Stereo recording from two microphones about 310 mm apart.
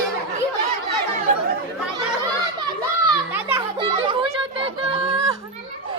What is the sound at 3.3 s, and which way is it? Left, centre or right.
Children playing, centre.